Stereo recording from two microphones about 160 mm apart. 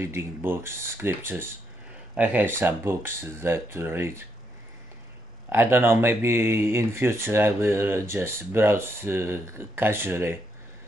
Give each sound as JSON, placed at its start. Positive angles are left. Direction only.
{"t": 0.0, "sound": "speech", "side_deg": -15}
{"t": 5.5, "sound": "speech", "side_deg": -15}